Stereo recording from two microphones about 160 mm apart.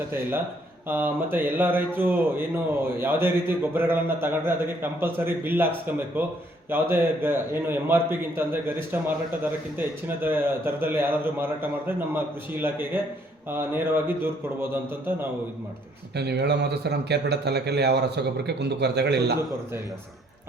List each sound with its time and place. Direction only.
0.1 s a man's voice: 15° right (ahead or behind)
16.1 s a man's voice: 90° right